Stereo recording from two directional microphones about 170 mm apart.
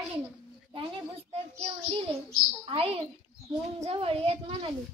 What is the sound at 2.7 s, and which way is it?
A woman's voice, 35° right (ahead or behind).